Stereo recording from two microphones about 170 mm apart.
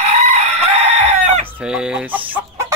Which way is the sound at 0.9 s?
45° right (ahead or behind).